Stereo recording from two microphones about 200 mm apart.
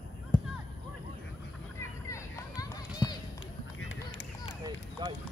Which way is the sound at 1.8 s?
15° left (ahead or behind).